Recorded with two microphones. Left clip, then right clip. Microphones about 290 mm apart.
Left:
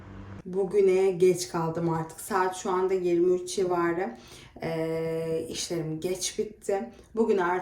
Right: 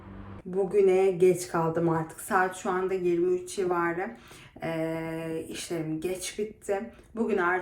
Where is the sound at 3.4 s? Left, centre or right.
Centre.